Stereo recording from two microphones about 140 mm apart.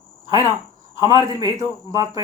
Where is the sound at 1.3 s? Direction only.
25° right (ahead or behind).